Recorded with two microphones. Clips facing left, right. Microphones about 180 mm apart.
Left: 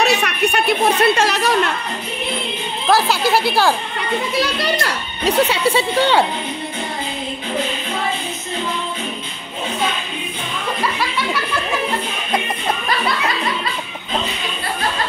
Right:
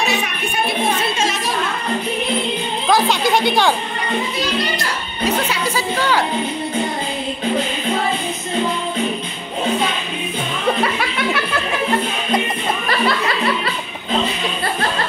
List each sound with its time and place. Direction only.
0.0 s speech: 70° left (ahead or behind)
2.9 s speech: 5° left (ahead or behind)
5.2 s speech: 30° left (ahead or behind)
10.8 s music: 55° right (ahead or behind)